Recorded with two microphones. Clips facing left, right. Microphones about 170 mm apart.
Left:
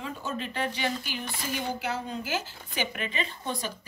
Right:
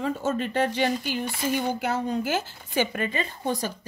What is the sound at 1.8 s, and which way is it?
Speech, 50° right (ahead or behind).